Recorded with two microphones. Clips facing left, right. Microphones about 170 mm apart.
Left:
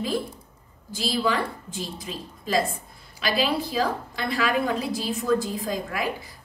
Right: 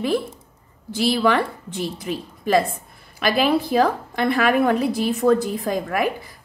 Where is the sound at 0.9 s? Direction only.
65° right (ahead or behind).